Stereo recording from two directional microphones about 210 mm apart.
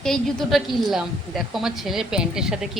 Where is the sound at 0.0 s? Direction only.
Centre (ahead or behind).